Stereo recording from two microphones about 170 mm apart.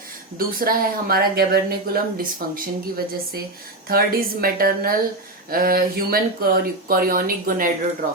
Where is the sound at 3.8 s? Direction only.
60° right (ahead or behind).